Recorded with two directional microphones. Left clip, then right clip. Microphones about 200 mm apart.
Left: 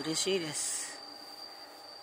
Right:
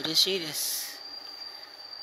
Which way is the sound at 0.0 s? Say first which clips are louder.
Right 10 dB; 35° left (ahead or behind).